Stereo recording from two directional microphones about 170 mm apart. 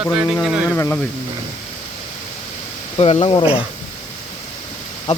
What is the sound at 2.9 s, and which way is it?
Speech, 40° left (ahead or behind).